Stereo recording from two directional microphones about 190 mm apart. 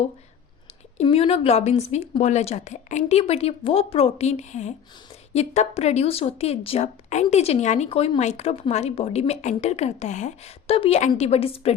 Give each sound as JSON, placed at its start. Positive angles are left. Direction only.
{"t": 0.9, "sound": "a woman's voice", "side_deg": 30}